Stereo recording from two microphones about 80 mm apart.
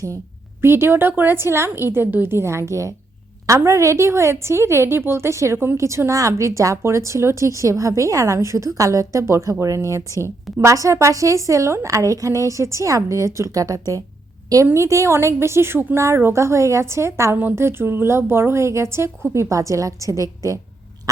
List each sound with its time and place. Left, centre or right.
0.6 s a woman's voice: right